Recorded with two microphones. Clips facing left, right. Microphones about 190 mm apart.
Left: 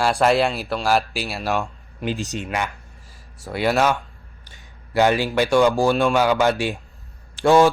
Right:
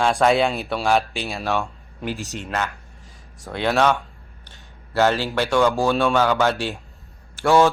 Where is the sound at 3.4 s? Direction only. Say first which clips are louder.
Even; 5° left (ahead or behind).